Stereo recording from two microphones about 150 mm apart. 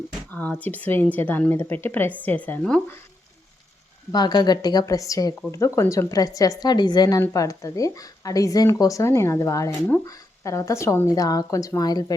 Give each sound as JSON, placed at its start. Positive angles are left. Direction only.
{"t": 0.3, "sound": "a woman's voice", "side_deg": 10}
{"t": 4.1, "sound": "a woman's voice", "side_deg": 30}